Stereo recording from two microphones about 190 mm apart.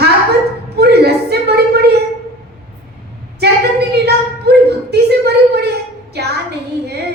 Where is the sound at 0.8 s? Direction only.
60° right (ahead or behind).